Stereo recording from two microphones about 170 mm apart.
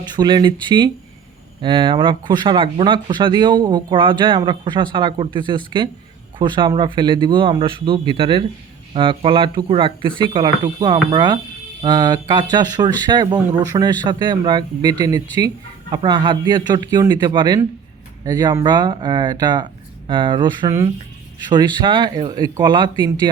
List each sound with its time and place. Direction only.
0.1 s speech: 25° right (ahead or behind)